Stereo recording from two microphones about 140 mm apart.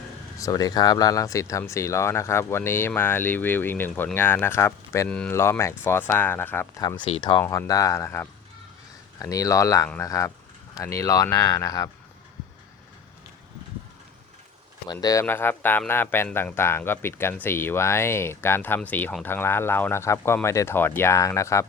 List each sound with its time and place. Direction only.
0.3 s speech: 25° left (ahead or behind)
5.0 s speech: 5° left (ahead or behind)
5.3 s speech: 20° left (ahead or behind)
7.2 s speech: 35° left (ahead or behind)
7.4 s speech: 20° left (ahead or behind)
15.0 s speech: 20° left (ahead or behind)